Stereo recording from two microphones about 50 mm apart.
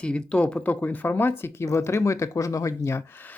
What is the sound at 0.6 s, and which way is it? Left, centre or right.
Speech, left.